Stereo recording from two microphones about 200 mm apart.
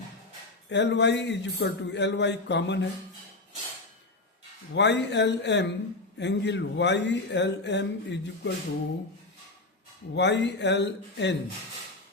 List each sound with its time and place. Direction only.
0.7 s speech: 60° left (ahead or behind)
4.7 s speech: 60° left (ahead or behind)
10.2 s speech: 60° left (ahead or behind)